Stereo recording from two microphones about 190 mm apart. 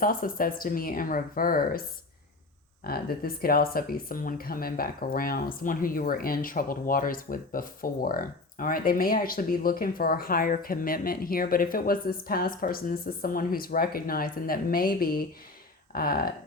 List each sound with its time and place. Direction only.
0.0 s speech: 50° left (ahead or behind)
2.8 s speech: 50° left (ahead or behind)